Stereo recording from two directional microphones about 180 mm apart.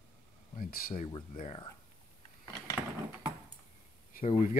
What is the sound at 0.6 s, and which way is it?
Speech, 55° left (ahead or behind).